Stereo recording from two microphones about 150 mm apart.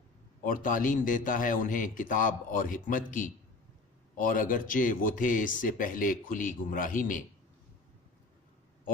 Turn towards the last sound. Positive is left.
turn(degrees=60)  # may be behind; listen again after turning